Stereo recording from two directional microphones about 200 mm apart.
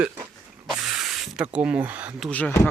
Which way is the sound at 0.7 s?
Centre (ahead or behind).